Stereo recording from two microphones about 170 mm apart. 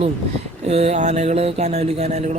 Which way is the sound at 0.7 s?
40° right (ahead or behind).